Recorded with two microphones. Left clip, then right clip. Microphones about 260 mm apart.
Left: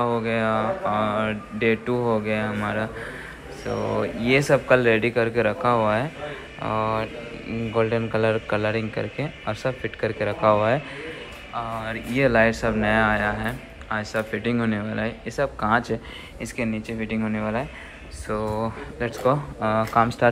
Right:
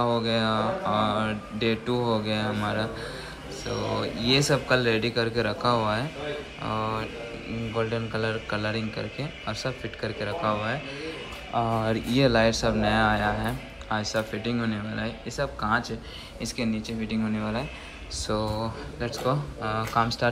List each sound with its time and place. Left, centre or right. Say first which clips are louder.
0.0 s a man's voice: left 2 dB; centre
3.9 s a man's voice: left 3 dB; centre
11.5 s speech: right 3 dB; right
12.1 s a man's voice: left 4 dB; centre